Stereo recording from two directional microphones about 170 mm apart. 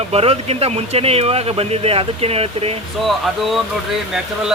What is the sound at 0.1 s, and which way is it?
Speech, 35° right (ahead or behind).